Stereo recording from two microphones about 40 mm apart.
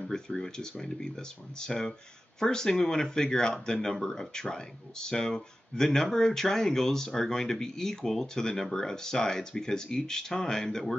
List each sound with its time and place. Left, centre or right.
0.4 s speech: centre